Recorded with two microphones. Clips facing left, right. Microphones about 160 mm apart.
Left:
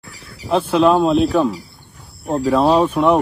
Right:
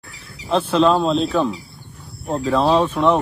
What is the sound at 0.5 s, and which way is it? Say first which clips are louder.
Speech: left 2 dB; 10° left (ahead or behind).